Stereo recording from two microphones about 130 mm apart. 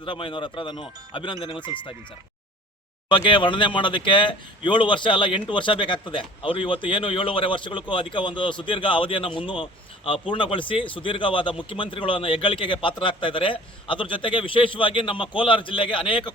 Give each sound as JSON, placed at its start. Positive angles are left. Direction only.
{"t": 0.0, "sound": "speech", "side_deg": 40}
{"t": 3.1, "sound": "speech", "side_deg": 40}